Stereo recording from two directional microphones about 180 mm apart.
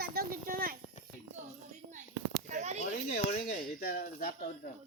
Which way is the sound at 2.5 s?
40° right (ahead or behind).